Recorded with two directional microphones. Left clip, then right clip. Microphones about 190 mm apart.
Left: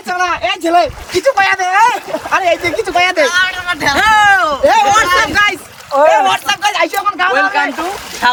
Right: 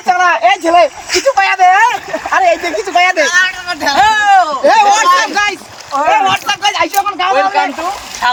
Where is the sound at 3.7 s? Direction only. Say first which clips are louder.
Even; 15° left (ahead or behind).